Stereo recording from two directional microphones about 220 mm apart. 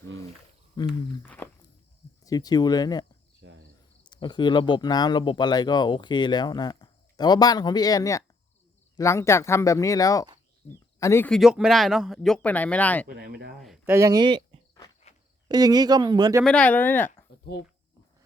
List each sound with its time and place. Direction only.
0.8 s speech: 20° left (ahead or behind)
1.4 s walk: 5° left (ahead or behind)
2.2 s speech: 15° left (ahead or behind)
3.4 s cricket: 55° right (ahead or behind)
4.1 s speech: 20° left (ahead or behind)
13.1 s speech: 45° right (ahead or behind)
13.6 s a sound: centre (ahead or behind)
13.9 s speech: 15° right (ahead or behind)
16.4 s speech: 5° left (ahead or behind)